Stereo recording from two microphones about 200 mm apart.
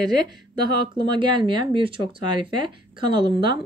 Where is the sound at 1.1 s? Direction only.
25° right (ahead or behind).